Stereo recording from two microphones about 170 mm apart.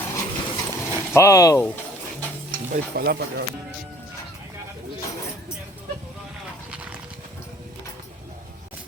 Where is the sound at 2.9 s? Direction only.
75° right (ahead or behind).